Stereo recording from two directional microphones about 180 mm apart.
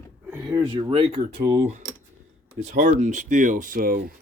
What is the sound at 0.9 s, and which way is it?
Speech, 25° right (ahead or behind).